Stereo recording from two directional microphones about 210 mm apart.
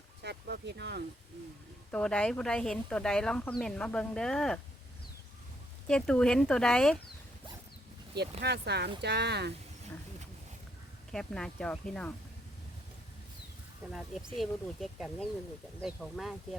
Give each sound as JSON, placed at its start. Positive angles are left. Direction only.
{"t": 0.2, "sound": "speech", "side_deg": -55}
{"t": 1.9, "sound": "speech", "side_deg": 5}
{"t": 5.9, "sound": "speech", "side_deg": 5}
{"t": 8.1, "sound": "speech", "side_deg": -50}
{"t": 11.1, "sound": "speech", "side_deg": 5}
{"t": 13.9, "sound": "speech", "side_deg": 0}